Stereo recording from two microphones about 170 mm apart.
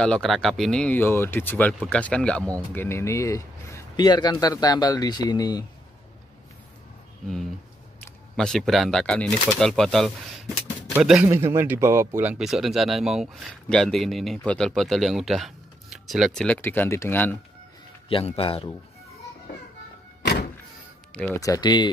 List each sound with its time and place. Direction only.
0.0 s speech: 5° left (ahead or behind); by 5.7 s 25° left (ahead or behind)
8.4 s speech: 5° left (ahead or behind)
11.2 s speech: 15° right (ahead or behind); by 17.4 s 10° left (ahead or behind)
18.0 s a man's voice: 35° left (ahead or behind)
20.2 s power windows: 70° left (ahead or behind)
21.4 s speech: 20° left (ahead or behind)